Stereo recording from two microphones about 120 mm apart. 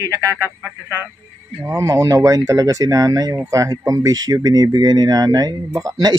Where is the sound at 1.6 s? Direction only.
25° right (ahead or behind).